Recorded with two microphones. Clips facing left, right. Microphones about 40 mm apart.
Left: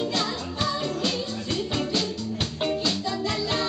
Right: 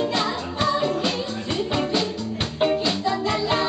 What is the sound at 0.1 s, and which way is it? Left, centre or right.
Music, centre.